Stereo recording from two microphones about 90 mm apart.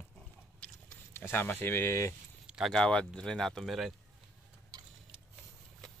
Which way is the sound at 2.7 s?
10° left (ahead or behind).